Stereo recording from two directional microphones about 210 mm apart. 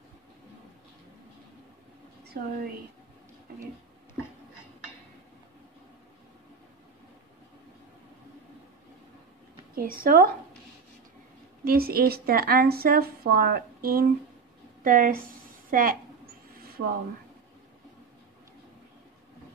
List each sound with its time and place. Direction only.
2.2 s a woman's voice: 45° right (ahead or behind)
9.8 s a woman's voice: 40° right (ahead or behind)
11.6 s a woman's voice: 45° right (ahead or behind)
16.6 s a sound: 45° right (ahead or behind)